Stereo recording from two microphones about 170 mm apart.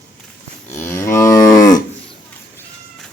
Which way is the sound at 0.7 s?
15° left (ahead or behind).